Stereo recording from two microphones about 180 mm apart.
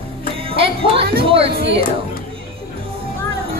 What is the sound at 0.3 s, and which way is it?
Music, 30° right (ahead or behind).